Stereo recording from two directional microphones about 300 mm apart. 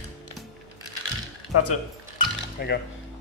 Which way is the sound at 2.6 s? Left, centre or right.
Left.